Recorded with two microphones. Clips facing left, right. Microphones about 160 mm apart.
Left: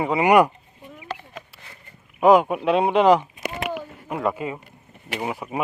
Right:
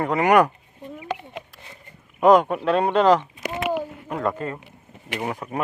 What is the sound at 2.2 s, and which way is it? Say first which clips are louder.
Speech: even; 5° left (ahead or behind).